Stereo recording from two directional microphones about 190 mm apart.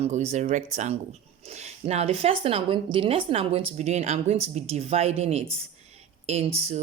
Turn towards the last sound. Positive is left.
turn(degrees=-35)  # may be behind; listen again after turning